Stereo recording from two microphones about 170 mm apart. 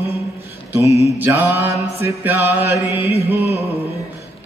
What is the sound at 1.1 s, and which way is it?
Chant, 10° right (ahead or behind).